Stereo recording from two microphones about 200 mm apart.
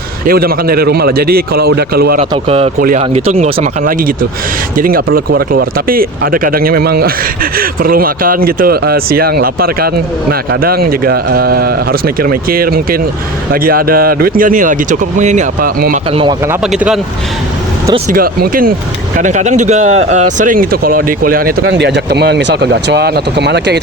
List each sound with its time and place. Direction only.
0.3 s speech: 50° right (ahead or behind)
2.3 s speech: 30° right (ahead or behind); by 16.0 s 45° right (ahead or behind)
16.5 s speech: 5° right (ahead or behind)
18.1 s speech: 50° right (ahead or behind)
21.6 s speech: 60° right (ahead or behind)